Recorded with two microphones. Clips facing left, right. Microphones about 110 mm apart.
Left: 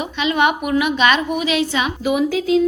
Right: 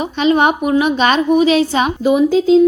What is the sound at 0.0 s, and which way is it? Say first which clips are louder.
A woman's voice: right 5 dB; 35° right (ahead or behind).